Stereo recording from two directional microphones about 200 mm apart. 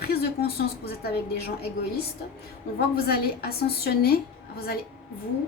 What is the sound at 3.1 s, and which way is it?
A woman's voice, 50° left (ahead or behind).